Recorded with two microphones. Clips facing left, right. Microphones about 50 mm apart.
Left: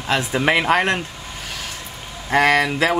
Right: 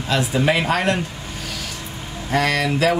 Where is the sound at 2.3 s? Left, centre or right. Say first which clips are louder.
Left 3 dB; left.